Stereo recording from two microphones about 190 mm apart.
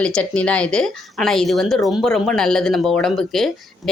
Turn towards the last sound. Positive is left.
turn(degrees=0)  # may be behind; listen again after turning